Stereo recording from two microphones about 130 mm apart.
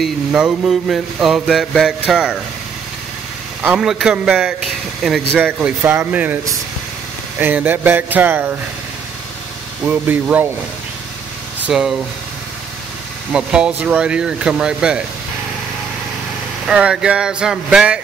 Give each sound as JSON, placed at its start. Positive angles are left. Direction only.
{"t": 0.0, "sound": "a sound", "side_deg": -5}
{"t": 3.6, "sound": "a sound", "side_deg": -5}
{"t": 5.6, "sound": "speech", "side_deg": -15}
{"t": 7.3, "sound": "speech", "side_deg": -15}
{"t": 9.8, "sound": "speech", "side_deg": -15}
{"t": 11.6, "sound": "speech", "side_deg": -5}
{"t": 13.3, "sound": "speech", "side_deg": -5}
{"t": 16.6, "sound": "speech", "side_deg": -5}